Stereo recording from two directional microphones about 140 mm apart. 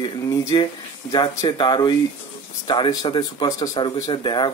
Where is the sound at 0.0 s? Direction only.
30° left (ahead or behind).